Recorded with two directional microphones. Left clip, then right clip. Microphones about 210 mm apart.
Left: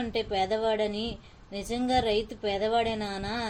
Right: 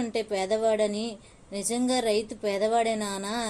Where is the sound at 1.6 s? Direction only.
Centre (ahead or behind).